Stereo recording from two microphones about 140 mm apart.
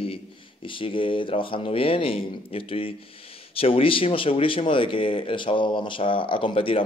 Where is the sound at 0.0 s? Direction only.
40° left (ahead or behind).